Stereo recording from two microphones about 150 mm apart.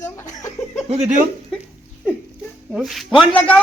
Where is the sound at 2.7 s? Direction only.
Centre (ahead or behind).